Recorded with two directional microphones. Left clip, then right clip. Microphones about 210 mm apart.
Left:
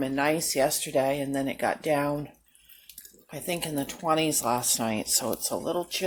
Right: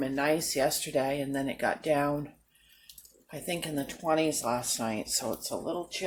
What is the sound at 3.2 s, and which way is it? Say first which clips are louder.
Speech: left 3 dB; 30° left (ahead or behind).